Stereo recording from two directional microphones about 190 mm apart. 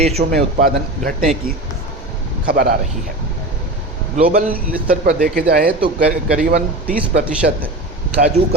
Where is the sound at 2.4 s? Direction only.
50° right (ahead or behind).